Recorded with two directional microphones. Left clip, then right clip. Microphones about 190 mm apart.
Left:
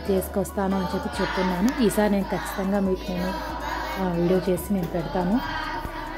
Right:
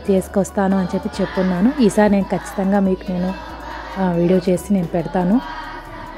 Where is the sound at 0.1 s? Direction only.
30° right (ahead or behind).